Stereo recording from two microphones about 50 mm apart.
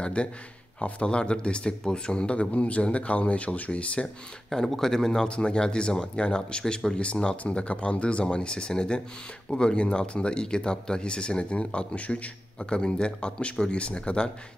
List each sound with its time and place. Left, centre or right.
0.0 s speech: left
4.5 s speech: centre; by 14.3 s left